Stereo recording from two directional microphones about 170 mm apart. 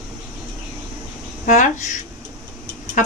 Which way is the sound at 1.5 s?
45° left (ahead or behind).